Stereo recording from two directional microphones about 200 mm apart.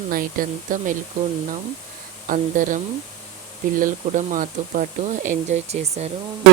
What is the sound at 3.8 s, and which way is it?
Speech, 40° right (ahead or behind).